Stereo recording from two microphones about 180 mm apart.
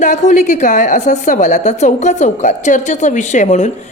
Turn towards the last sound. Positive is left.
turn(degrees=40)  # may be behind; listen again after turning